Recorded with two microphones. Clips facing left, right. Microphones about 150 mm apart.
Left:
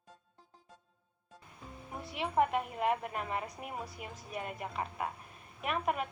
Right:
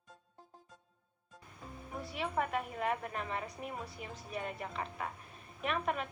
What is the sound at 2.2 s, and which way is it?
A woman's voice, 15° left (ahead or behind).